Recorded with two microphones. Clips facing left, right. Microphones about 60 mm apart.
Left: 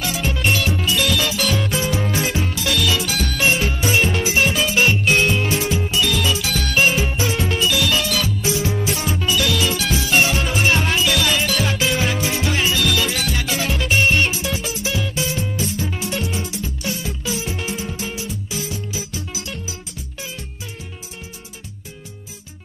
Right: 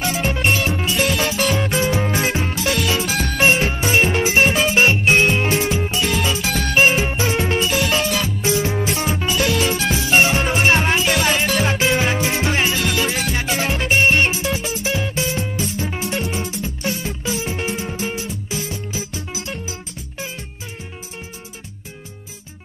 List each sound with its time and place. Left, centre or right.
0.0 s music: right
4.7 s music: right
6.5 s music: right
7.0 s music: right
10.4 s music: right